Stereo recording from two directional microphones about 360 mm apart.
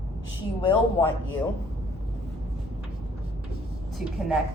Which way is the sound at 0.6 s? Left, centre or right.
Centre.